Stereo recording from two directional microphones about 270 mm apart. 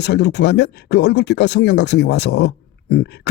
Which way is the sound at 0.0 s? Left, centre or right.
Left.